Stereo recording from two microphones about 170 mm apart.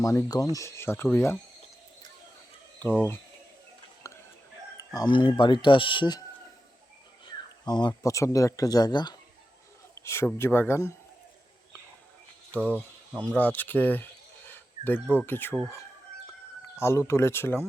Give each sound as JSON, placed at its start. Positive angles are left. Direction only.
{"t": 0.0, "sound": "speech", "side_deg": 20}
{"t": 4.0, "sound": "whispering", "side_deg": 20}
{"t": 4.9, "sound": "speech", "side_deg": 25}
{"t": 7.3, "sound": "speech", "side_deg": 25}
{"t": 12.5, "sound": "speech", "side_deg": 10}
{"t": 16.7, "sound": "speech", "side_deg": 15}